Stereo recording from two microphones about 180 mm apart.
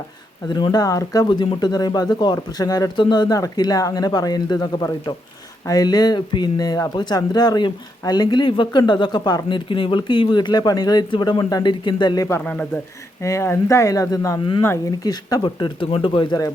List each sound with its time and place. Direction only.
0.4 s speech: 25° left (ahead or behind)